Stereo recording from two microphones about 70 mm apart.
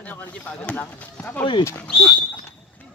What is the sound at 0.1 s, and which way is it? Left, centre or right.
Speech, left.